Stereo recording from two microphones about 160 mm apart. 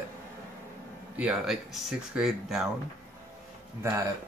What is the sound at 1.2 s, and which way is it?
Speech, centre (ahead or behind).